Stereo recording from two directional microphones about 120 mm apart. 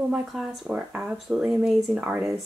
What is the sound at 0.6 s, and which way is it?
Speech, 10° right (ahead or behind).